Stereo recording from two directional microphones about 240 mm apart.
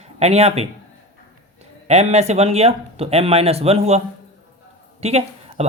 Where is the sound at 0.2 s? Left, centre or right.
Right.